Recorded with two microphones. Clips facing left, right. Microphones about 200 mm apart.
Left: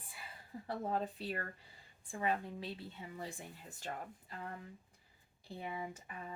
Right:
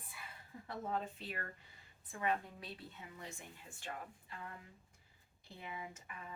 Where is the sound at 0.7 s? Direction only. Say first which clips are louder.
Left 3 dB; 35° left (ahead or behind).